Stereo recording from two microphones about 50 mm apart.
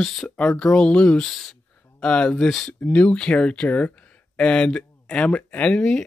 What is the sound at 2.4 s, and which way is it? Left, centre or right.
Speech, centre.